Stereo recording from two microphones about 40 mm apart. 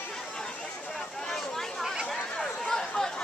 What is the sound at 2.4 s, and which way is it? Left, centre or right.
Chatter, centre.